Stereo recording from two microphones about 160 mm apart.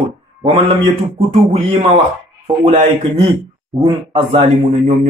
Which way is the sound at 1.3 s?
40° right (ahead or behind).